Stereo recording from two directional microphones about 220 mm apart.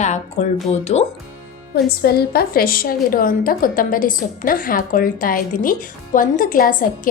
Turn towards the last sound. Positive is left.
turn(degrees=40)  # may be behind; listen again after turning